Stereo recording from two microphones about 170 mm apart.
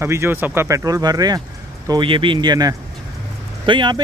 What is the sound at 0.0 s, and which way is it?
Speech, 15° right (ahead or behind).